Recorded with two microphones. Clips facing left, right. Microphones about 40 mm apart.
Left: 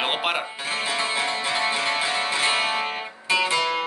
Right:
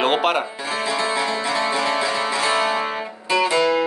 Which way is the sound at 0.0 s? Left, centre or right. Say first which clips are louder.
Right 6 dB; centre.